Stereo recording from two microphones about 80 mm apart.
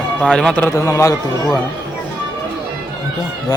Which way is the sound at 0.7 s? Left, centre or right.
Left.